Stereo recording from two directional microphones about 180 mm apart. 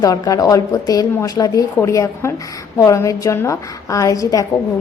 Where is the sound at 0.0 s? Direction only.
20° left (ahead or behind).